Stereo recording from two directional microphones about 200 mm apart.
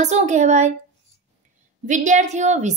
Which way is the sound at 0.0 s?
35° right (ahead or behind).